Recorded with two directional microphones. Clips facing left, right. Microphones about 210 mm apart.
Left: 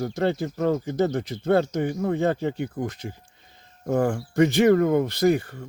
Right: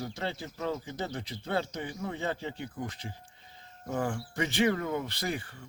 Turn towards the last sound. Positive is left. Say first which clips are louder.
# left 14 dB
turn(degrees=40)  # may be behind; listen again after turning